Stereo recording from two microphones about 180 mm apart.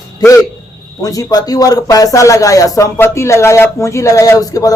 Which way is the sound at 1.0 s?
20° left (ahead or behind).